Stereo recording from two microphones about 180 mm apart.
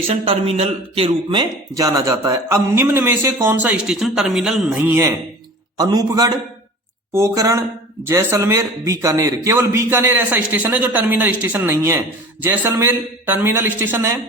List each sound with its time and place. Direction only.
0.1 s a man's voice: 35° right (ahead or behind); by 14.2 s 10° right (ahead or behind)